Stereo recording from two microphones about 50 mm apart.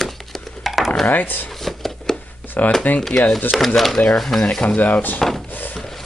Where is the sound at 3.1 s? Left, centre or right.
Centre.